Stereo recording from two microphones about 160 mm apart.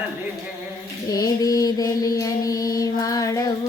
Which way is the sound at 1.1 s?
25° left (ahead or behind).